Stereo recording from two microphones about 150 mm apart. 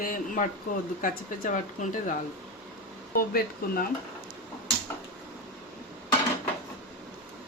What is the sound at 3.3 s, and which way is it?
Speech, 80° left.